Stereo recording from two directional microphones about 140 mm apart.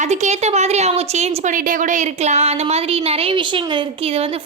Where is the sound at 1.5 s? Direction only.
70° right (ahead or behind).